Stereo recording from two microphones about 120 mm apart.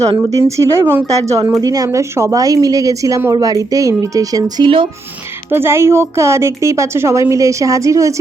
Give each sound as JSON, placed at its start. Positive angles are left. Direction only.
{"t": 0.2, "sound": "a woman's voice", "side_deg": -30}
{"t": 5.5, "sound": "a woman's voice", "side_deg": -20}